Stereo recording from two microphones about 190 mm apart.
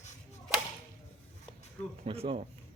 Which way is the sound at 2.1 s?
30° right (ahead or behind).